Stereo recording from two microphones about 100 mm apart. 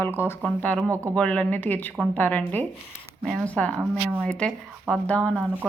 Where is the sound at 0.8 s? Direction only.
30° right (ahead or behind).